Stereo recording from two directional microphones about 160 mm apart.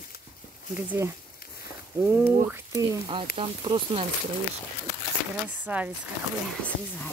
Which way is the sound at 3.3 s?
35° right (ahead or behind).